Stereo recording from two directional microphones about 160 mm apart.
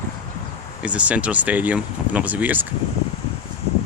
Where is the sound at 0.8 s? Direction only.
10° right (ahead or behind).